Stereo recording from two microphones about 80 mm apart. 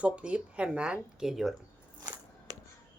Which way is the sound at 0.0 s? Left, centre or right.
Centre.